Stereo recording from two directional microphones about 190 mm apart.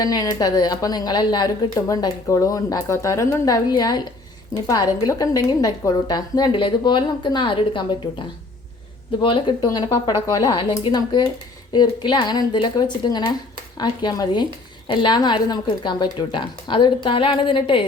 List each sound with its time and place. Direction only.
0.0 s a woman's voice: 20° left (ahead or behind)
9.2 s a woman's voice: 25° left (ahead or behind)